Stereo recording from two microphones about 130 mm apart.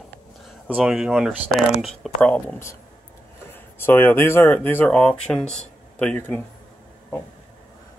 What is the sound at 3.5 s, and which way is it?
Speech, 15° left (ahead or behind).